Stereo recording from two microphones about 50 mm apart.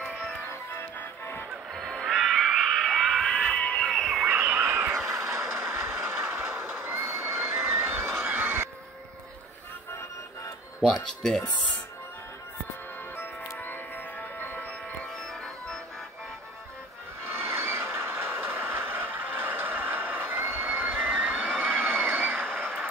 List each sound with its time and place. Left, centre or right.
0.9 s music: left
2.0 s a sound: centre
3.4 s music: left
3.9 s a sound: centre
4.3 s frog: right
5.0 s a sound: right
5.6 s train: right
8.4 s music: right
13.1 s music: left
17.3 s train: right